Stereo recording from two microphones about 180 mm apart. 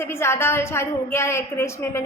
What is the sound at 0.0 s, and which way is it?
A woman's voice, 15° left (ahead or behind).